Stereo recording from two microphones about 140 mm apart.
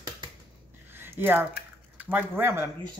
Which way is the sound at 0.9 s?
15° right (ahead or behind).